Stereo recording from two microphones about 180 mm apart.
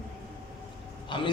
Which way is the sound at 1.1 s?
25° left (ahead or behind).